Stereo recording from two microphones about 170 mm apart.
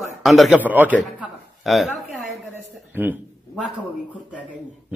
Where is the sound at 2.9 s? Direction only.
10° right (ahead or behind).